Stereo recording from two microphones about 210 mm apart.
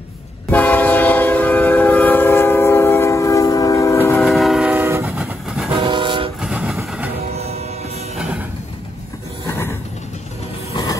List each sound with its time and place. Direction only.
0.5 s train: 10° left (ahead or behind)
4.1 s train: centre (ahead or behind)
5.8 s train: 20° right (ahead or behind)
6.4 s train: 5° right (ahead or behind)
7.3 s music: 30° right (ahead or behind)
8.2 s music: 5° right (ahead or behind)
9.5 s a sound: 10° left (ahead or behind)
10.7 s mechanisms: 20° left (ahead or behind)